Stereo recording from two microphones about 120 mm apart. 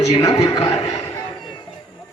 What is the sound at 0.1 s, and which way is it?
Speech, 30° left (ahead or behind).